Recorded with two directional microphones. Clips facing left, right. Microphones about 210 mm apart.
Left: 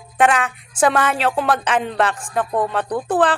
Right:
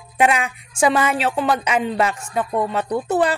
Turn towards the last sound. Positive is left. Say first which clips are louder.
# left 1 dB
turn(degrees=-10)  # may be behind; listen again after turning